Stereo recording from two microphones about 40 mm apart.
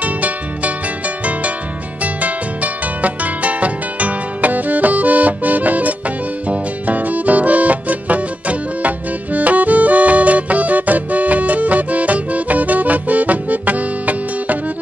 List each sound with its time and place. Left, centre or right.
0.0 s music: right
2.2 s music: right